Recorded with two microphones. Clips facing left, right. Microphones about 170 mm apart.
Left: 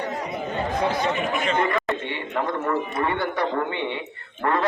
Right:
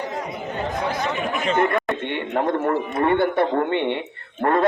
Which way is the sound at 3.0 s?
55° right (ahead or behind).